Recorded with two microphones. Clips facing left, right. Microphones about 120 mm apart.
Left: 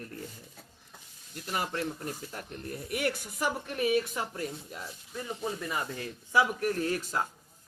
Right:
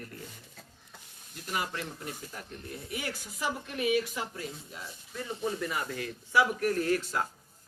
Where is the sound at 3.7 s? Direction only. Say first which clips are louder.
Left 1 dB; 35° left (ahead or behind).